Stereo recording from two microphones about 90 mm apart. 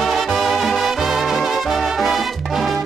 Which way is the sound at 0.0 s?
Centre (ahead or behind).